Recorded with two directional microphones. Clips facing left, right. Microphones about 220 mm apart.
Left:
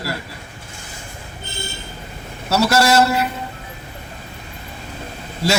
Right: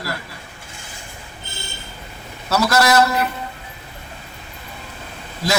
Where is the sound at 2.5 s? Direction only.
30° left (ahead or behind).